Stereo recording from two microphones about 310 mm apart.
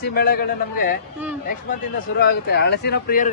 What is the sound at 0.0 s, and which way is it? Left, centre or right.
Speech, left.